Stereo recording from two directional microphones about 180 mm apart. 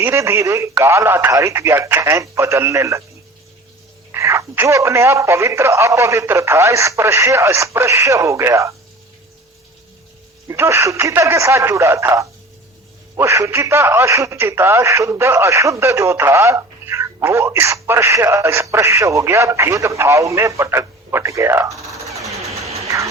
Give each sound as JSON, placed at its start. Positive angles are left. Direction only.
{"t": 0.0, "sound": "speech", "side_deg": -15}
{"t": 4.1, "sound": "speech", "side_deg": -15}
{"t": 10.5, "sound": "speech", "side_deg": -15}
{"t": 22.9, "sound": "speech", "side_deg": -15}